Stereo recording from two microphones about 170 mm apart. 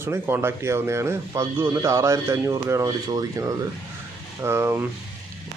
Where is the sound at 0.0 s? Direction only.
15° right (ahead or behind).